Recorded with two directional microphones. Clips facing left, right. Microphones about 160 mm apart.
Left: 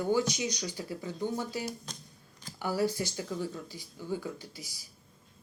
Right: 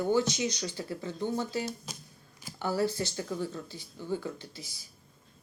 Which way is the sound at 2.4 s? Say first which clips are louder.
Right 1 dB; 10° right (ahead or behind).